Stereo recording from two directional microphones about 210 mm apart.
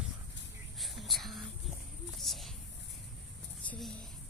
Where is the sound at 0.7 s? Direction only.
Centre (ahead or behind).